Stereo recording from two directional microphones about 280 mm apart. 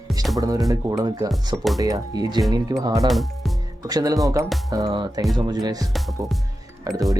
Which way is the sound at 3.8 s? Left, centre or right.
Centre.